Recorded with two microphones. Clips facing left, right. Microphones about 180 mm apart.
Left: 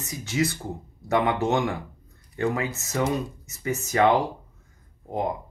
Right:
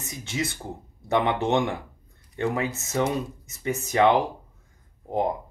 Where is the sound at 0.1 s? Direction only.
25° right (ahead or behind).